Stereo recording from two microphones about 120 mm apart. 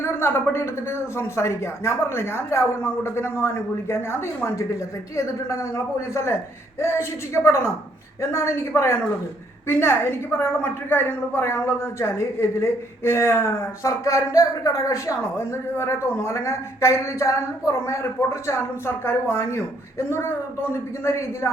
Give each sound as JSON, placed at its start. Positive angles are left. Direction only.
{"t": 0.0, "sound": "a woman's voice", "side_deg": 20}